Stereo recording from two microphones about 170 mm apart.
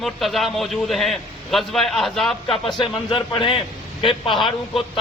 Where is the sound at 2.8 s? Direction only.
30° left (ahead or behind).